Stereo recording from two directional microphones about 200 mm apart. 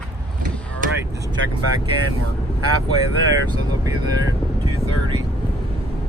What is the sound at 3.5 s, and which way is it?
Speech, 20° right (ahead or behind).